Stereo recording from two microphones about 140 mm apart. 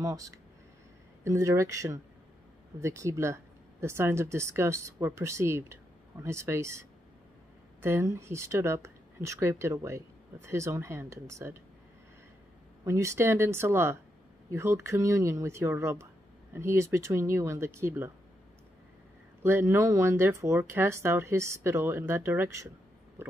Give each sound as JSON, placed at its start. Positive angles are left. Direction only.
{"t": 0.0, "sound": "speech", "side_deg": -25}
{"t": 12.8, "sound": "speech", "side_deg": -20}
{"t": 19.4, "sound": "speech", "side_deg": -15}